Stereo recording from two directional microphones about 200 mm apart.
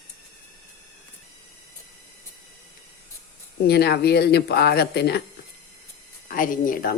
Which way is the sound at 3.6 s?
50° left (ahead or behind).